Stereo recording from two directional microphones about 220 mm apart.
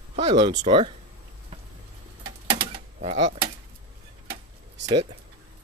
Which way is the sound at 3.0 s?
30° right (ahead or behind).